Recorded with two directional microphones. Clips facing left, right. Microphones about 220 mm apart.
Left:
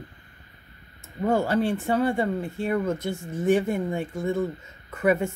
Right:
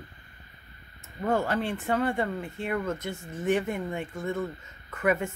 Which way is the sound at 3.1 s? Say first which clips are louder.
Left 5 dB; 10° left (ahead or behind).